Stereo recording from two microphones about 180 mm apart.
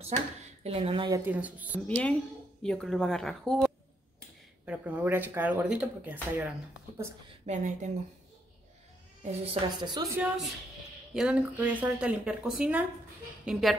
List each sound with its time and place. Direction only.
0.7 s a woman's voice: 35° right (ahead or behind)
1.2 s speech: 10° right (ahead or behind)
1.9 s speech: 5° left (ahead or behind)
4.6 s speech: 10° right (ahead or behind)
7.4 s a woman's voice: 40° right (ahead or behind)
9.2 s a woman's voice: 35° right (ahead or behind)
10.1 s speech: 5° right (ahead or behind)